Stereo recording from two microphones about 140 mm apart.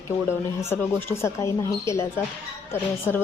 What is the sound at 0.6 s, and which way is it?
A woman's voice, 20° left (ahead or behind).